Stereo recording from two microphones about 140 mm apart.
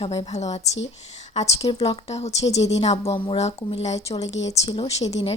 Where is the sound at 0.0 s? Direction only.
45° left (ahead or behind).